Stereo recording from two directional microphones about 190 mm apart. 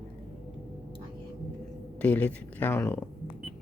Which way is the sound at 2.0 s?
10° left (ahead or behind).